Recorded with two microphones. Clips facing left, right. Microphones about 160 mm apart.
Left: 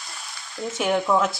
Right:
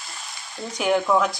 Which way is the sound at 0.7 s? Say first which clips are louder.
Right 1 dB; centre (ahead or behind).